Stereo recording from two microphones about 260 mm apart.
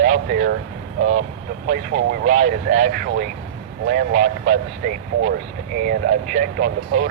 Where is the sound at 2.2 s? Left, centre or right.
Right.